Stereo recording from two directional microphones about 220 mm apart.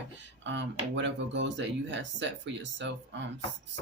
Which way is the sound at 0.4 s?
55° right (ahead or behind).